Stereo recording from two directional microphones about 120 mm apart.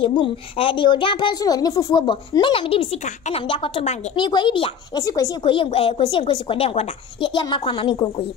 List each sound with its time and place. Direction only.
0.0 s a woman's voice: 50° left (ahead or behind); by 2.0 s 30° left (ahead or behind)
2.0 s a woman's voice: 45° left (ahead or behind)
4.9 s speech: 30° left (ahead or behind)
5.4 s a woman's voice: 45° left (ahead or behind)